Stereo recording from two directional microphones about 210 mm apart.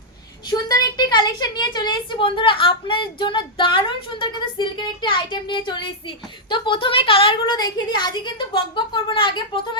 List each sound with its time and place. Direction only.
0.5 s a woman's voice: 20° left (ahead or behind)